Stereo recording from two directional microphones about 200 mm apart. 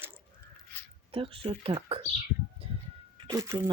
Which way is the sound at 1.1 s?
25° right (ahead or behind).